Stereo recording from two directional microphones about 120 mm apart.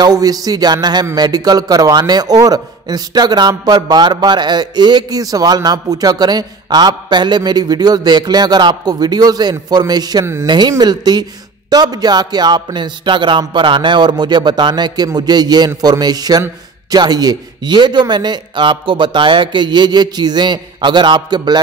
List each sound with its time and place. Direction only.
0.0 s a man's voice: 35° right (ahead or behind)